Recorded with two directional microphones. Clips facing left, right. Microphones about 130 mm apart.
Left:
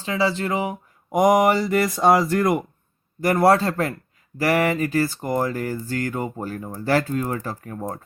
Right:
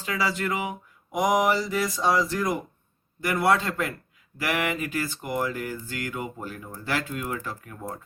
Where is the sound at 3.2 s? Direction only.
40° left (ahead or behind).